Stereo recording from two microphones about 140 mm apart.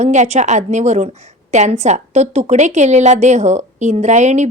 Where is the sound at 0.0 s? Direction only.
55° right (ahead or behind).